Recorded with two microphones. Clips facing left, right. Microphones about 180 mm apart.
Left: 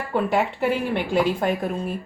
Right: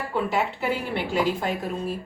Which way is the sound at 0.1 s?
55° left (ahead or behind).